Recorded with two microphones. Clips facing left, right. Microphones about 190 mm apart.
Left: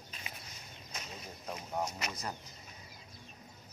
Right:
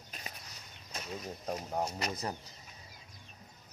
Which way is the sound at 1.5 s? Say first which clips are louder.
Right 2 dB; 35° right (ahead or behind).